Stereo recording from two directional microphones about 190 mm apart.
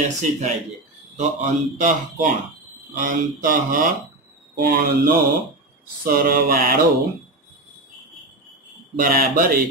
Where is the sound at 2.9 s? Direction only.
45° right (ahead or behind).